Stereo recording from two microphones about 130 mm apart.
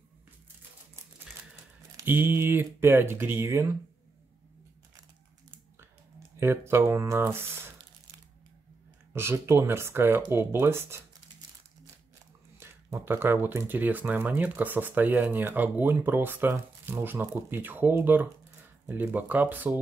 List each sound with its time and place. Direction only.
2.0 s speech: 15° right (ahead or behind)
5.8 s a sound: 20° right (ahead or behind)
9.1 s speech: 20° right (ahead or behind)
12.5 s speech: 20° right (ahead or behind)